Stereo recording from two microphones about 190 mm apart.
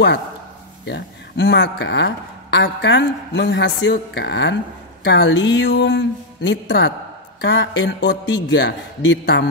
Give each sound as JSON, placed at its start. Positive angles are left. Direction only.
{"t": 0.8, "sound": "speech", "side_deg": 65}